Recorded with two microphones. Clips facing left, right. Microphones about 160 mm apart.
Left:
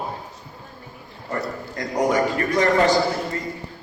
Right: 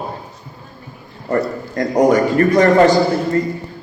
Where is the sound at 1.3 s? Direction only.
55° right (ahead or behind).